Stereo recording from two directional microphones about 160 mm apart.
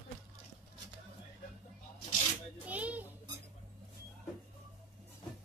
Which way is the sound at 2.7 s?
10° right (ahead or behind).